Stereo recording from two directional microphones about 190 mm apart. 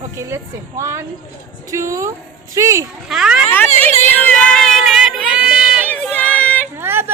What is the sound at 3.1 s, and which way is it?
Speech, 5° right (ahead or behind).